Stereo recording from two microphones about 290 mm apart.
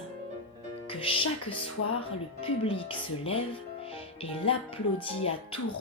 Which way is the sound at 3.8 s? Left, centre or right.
Centre.